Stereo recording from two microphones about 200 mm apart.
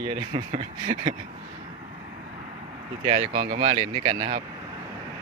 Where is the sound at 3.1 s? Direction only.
30° right (ahead or behind).